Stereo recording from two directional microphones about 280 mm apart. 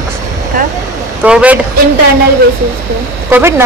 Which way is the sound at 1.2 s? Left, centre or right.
Centre.